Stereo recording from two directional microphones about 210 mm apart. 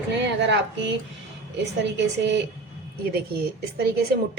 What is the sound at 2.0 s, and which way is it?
A woman's voice, 55° right (ahead or behind).